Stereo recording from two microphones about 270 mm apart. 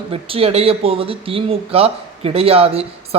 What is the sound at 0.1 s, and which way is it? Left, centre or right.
Speech, right.